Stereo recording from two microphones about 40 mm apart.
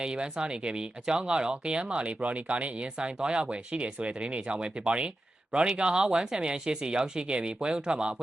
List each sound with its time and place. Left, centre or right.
0.0 s speech: right